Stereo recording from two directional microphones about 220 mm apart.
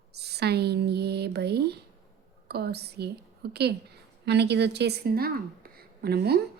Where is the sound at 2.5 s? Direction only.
45° right (ahead or behind).